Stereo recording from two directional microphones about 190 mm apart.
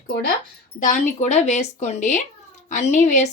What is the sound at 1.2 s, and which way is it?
A woman's voice, 35° left (ahead or behind).